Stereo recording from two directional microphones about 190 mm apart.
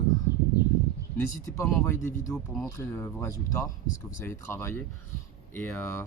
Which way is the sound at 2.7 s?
15° left (ahead or behind).